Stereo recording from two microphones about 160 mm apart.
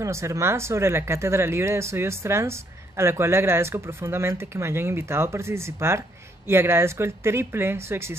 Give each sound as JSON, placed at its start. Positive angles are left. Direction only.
{"t": 0.0, "sound": "speech", "side_deg": -20}